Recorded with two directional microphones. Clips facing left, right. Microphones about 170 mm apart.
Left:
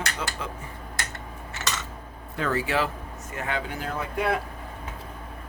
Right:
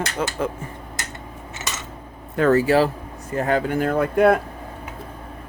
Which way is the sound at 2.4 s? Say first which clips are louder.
Right 10 dB; 45° right (ahead or behind).